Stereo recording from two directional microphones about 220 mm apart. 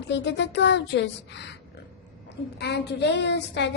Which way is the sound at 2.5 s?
50° left (ahead or behind).